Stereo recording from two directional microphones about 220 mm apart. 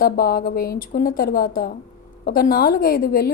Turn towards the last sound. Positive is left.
turn(degrees=40)  # may be behind; listen again after turning